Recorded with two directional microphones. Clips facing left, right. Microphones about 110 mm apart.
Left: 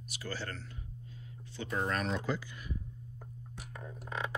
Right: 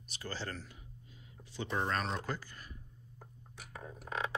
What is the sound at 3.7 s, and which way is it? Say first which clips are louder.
Music: even; 5° right (ahead or behind).